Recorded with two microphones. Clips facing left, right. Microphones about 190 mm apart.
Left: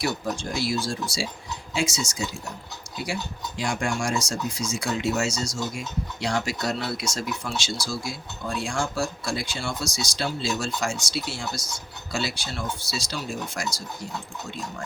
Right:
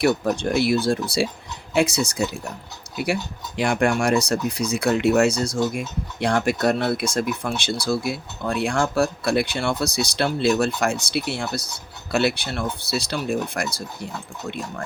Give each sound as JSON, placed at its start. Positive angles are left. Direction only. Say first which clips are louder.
{"t": 0.0, "sound": "speech", "louder": "right 8 dB", "side_deg": -60}
{"t": 3.6, "sound": "speech", "louder": "right 7 dB", "side_deg": -60}